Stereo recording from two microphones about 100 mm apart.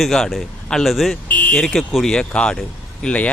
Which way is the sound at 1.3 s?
15° left (ahead or behind).